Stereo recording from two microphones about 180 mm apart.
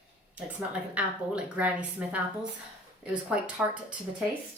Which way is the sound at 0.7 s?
5° right (ahead or behind).